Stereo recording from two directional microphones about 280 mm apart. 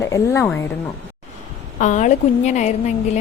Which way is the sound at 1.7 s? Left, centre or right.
Left.